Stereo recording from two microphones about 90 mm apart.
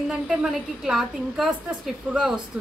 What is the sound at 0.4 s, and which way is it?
A woman's voice, 10° right (ahead or behind).